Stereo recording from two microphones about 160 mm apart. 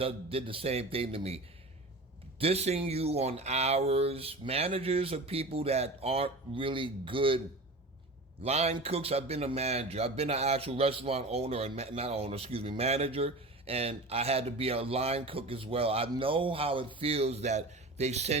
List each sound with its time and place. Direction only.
0.0 s speech: 35° right (ahead or behind)
2.4 s speech: 40° right (ahead or behind)
8.4 s speech: 40° right (ahead or behind)